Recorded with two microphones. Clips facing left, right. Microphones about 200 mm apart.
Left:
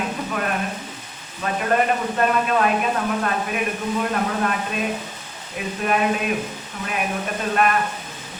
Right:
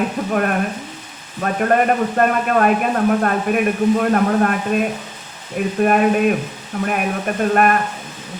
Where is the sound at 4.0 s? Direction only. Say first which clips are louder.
Right 7 dB; 50° right (ahead or behind).